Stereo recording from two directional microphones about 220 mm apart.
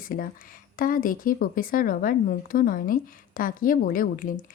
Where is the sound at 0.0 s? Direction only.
40° left (ahead or behind).